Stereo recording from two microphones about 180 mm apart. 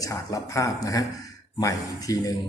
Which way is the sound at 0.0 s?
20° left (ahead or behind).